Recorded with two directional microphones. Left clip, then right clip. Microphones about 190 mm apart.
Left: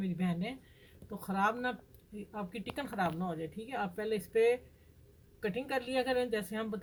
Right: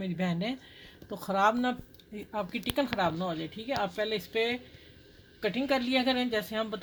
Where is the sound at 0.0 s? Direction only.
55° right (ahead or behind).